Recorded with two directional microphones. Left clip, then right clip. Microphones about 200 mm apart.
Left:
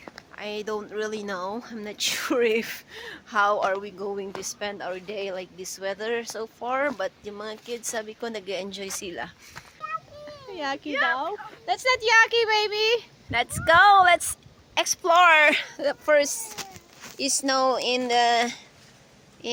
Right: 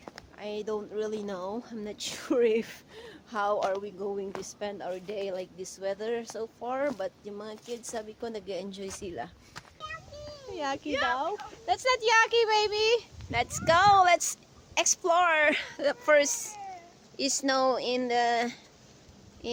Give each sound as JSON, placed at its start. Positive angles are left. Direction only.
{"t": 0.3, "sound": "a child's voice", "side_deg": 5}
{"t": 10.5, "sound": "a child's voice", "side_deg": 20}
{"t": 10.8, "sound": "speech", "side_deg": -15}
{"t": 11.1, "sound": "a child's voice", "side_deg": 20}